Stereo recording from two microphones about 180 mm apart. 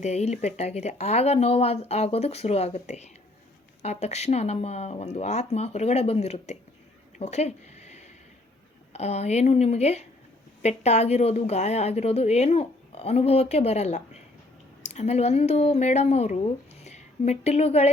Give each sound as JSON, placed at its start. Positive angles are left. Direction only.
{"t": 0.0, "sound": "a woman's voice", "side_deg": 35}
{"t": 7.2, "sound": "a sound", "side_deg": 35}
{"t": 8.9, "sound": "a woman's voice", "side_deg": 35}